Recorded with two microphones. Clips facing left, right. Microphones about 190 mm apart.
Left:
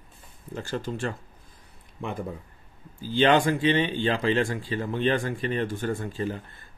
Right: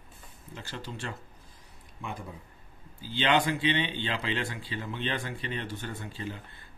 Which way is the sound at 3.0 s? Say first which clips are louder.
Left 6 dB; 45° left (ahead or behind).